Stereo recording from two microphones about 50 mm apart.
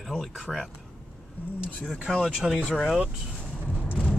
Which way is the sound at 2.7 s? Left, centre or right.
Centre.